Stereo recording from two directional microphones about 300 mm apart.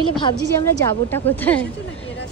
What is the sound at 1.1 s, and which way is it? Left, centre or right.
Speech, centre.